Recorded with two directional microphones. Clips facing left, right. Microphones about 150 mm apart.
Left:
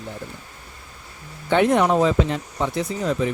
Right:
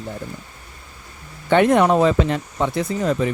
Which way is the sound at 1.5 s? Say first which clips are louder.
Right 3 dB; 60° right (ahead or behind).